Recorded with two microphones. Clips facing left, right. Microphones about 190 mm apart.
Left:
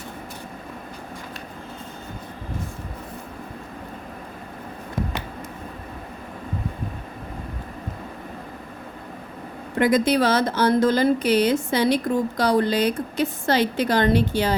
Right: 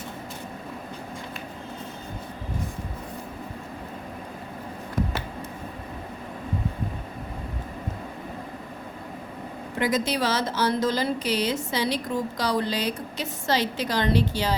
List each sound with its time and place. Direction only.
9.7 s speech: 55° left (ahead or behind)